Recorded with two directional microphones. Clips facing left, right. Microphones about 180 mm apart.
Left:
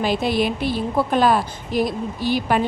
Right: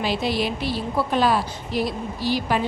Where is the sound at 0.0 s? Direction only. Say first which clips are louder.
Left 3 dB; 50° left (ahead or behind).